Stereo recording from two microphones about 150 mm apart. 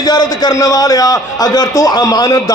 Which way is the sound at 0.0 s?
25° left (ahead or behind).